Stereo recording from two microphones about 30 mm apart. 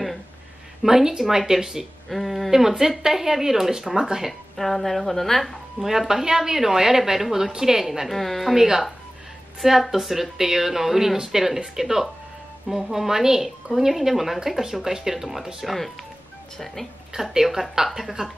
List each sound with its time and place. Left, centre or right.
0.8 s a woman's voice: centre
2.0 s speech: centre
2.5 s a woman's voice: centre
4.3 s a woman's voice: centre
5.8 s a woman's voice: centre
8.1 s a woman's voice: centre
8.5 s a woman's voice: centre
17.3 s a woman's voice: centre
18.2 s speech: right